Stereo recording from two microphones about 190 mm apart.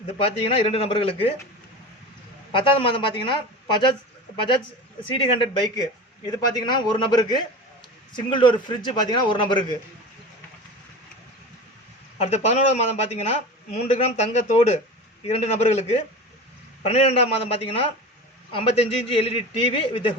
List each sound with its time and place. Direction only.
0.2 s a man's voice: 30° left (ahead or behind)
2.5 s a man's voice: 25° left (ahead or behind)
5.1 s a man's voice: 25° left (ahead or behind)
12.2 s a man's voice: 35° left (ahead or behind)